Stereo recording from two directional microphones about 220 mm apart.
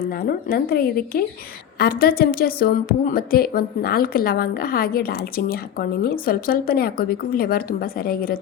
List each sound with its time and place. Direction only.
0.2 s a woman's voice: 45° left (ahead or behind)